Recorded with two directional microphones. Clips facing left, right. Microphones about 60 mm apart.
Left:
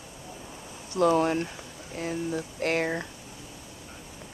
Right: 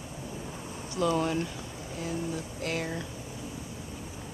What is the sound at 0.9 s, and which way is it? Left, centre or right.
Speech, left.